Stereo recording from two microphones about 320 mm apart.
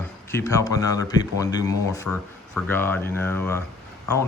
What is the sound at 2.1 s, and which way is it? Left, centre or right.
Speech, left.